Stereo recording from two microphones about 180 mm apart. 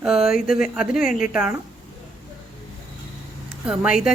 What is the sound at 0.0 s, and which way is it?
Speech, 5° right (ahead or behind).